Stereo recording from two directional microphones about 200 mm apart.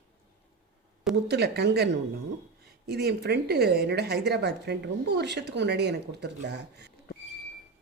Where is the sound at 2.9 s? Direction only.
55° right (ahead or behind).